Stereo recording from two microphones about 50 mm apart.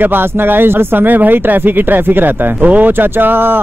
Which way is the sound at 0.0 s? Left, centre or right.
Right.